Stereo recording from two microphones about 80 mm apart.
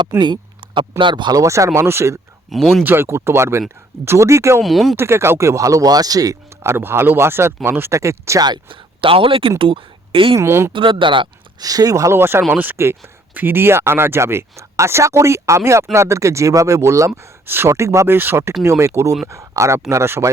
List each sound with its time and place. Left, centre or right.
0.2 s speech: right
1.3 s speech: right
2.5 s speech: centre
2.8 s speech: right
4.6 s speech: centre
4.9 s speech: right
6.6 s speech: right
8.4 s speech: right
9.6 s a sound: right
10.3 s speech: right
10.7 s speech: right
11.6 s speech: right
17.4 s speech: right